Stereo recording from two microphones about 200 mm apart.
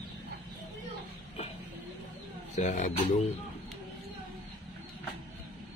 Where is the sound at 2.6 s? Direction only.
35° left (ahead or behind).